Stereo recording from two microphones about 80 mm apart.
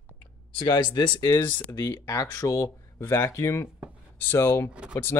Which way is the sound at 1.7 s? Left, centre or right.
Left.